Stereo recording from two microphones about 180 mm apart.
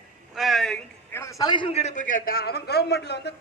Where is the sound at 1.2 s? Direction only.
20° left (ahead or behind).